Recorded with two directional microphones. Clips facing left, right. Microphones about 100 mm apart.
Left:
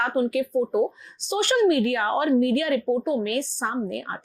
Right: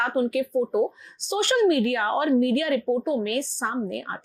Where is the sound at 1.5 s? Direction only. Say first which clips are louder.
Even; 15° left (ahead or behind).